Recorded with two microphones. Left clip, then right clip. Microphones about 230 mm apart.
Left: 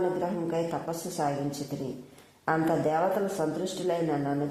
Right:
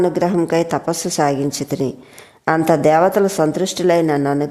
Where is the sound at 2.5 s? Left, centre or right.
Right.